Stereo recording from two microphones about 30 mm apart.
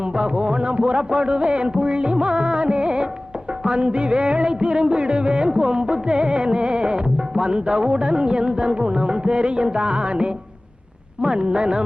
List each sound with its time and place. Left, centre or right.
0.0 s music: right